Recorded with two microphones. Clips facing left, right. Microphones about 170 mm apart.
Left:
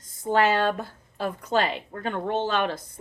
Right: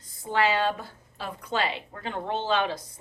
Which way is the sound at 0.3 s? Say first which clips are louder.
Left 3 dB; 50° left (ahead or behind).